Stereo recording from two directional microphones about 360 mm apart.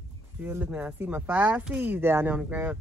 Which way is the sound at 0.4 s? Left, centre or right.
Centre.